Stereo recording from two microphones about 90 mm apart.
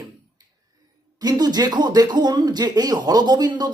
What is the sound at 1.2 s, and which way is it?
Speech, 50° right (ahead or behind).